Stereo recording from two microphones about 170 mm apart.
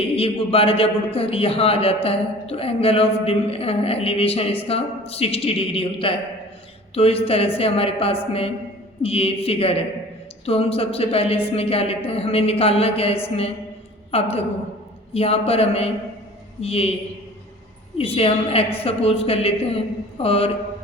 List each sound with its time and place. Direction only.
0.0 s a man's voice: 35° left (ahead or behind)
17.9 s a man's voice: 35° left (ahead or behind)